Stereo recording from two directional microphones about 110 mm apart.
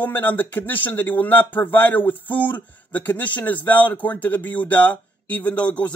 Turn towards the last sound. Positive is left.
turn(degrees=10)  # may be behind; listen again after turning